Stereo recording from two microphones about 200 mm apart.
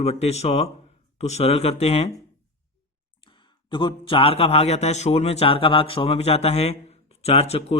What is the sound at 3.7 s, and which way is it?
Speech, 25° left (ahead or behind).